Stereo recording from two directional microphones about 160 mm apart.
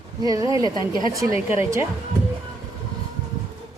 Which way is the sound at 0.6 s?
25° left (ahead or behind).